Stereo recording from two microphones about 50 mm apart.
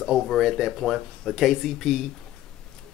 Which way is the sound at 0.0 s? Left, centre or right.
Centre.